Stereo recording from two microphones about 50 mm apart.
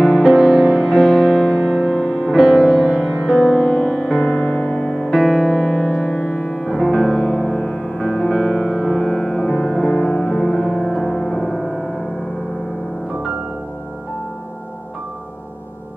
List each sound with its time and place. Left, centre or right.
0.0 s music: centre
2.0 s music: centre
4.4 s music: centre
4.8 s music: centre
5.6 s music: centre
6.1 s music: left
6.6 s music: centre
7.4 s music: centre
8.2 s music: centre